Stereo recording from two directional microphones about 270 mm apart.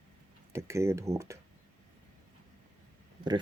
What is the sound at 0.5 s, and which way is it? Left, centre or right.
Speech, centre.